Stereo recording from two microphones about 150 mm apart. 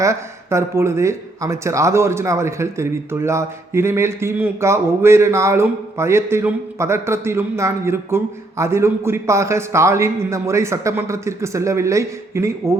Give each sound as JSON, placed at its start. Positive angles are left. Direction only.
{"t": 0.0, "sound": "speech", "side_deg": -20}